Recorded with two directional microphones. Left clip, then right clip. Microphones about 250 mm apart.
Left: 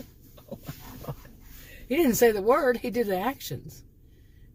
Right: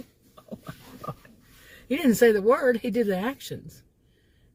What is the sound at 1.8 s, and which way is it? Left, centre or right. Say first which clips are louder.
Speech: right 1 dB; centre.